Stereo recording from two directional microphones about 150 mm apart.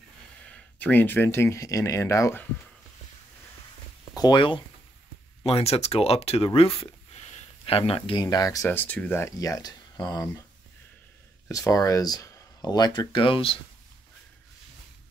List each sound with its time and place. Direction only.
0.5 s speech: 10° left (ahead or behind)
4.1 s speech: 30° left (ahead or behind)
5.4 s speech: 40° left (ahead or behind); by 8.6 s 25° left (ahead or behind)
8.6 s speech: 10° left (ahead or behind)
11.4 s speech: 20° left (ahead or behind)